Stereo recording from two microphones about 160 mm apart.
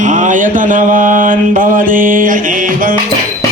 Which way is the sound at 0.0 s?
50° right (ahead or behind).